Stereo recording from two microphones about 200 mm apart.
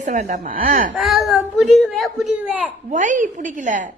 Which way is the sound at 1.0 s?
Centre (ahead or behind).